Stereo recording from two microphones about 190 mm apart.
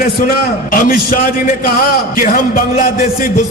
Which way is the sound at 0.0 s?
50° left (ahead or behind).